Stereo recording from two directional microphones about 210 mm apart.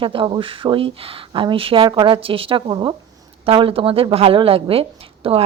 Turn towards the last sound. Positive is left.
turn(degrees=-25)  # may be behind; listen again after turning